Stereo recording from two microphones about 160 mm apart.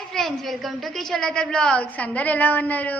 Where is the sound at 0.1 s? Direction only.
Centre (ahead or behind).